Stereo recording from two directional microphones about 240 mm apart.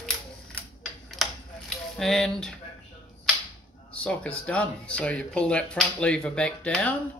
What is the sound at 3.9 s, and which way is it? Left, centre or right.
Speech, centre.